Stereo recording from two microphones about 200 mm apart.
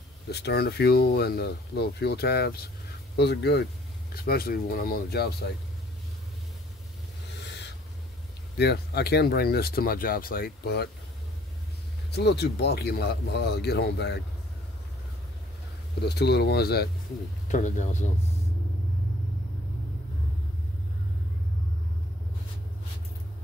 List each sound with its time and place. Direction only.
0.3 s speech: 55° left (ahead or behind)
8.5 s speech: 55° left (ahead or behind)
12.1 s speech: 55° left (ahead or behind)
16.0 s speech: 55° left (ahead or behind)
17.5 s speech: 40° left (ahead or behind)